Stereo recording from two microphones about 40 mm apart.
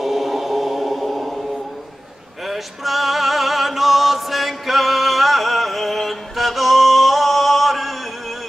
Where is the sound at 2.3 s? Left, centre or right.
Centre.